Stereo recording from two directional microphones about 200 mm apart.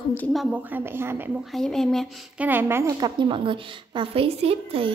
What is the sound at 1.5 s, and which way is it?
A woman's voice, centre (ahead or behind).